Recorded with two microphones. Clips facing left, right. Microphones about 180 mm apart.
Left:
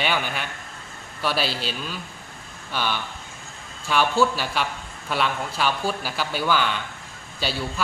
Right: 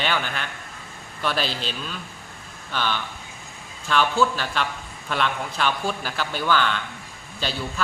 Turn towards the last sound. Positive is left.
turn(degrees=10)  # may be behind; listen again after turning